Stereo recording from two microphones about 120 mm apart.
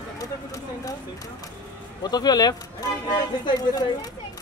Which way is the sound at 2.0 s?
35° left (ahead or behind).